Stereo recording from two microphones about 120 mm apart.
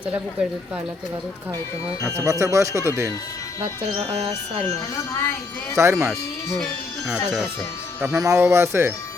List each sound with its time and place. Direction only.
2.0 s speech: 25° right (ahead or behind)
3.6 s speech: 55° right (ahead or behind)
5.7 s speech: 25° right (ahead or behind)
8.1 s speech: 25° right (ahead or behind)